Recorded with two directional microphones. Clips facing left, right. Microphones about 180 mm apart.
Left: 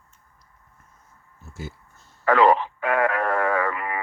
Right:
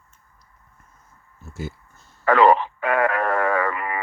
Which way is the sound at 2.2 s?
60° right (ahead or behind).